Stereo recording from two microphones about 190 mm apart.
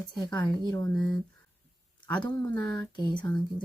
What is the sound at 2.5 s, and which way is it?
Speech, 15° left (ahead or behind).